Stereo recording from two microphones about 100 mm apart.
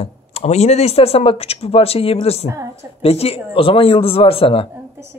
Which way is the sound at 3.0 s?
80° left.